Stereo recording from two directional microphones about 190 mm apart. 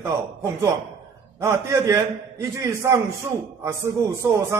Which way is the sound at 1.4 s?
15° right (ahead or behind).